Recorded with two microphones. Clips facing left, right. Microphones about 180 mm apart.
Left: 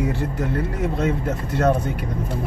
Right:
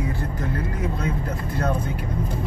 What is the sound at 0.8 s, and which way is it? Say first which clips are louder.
Speech: left 4 dB; 75° left (ahead or behind).